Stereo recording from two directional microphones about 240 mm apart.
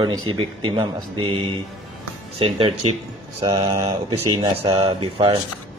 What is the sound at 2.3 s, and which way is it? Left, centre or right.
Speech, right.